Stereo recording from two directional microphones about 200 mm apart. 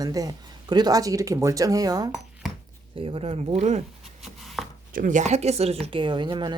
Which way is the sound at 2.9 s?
25° right (ahead or behind).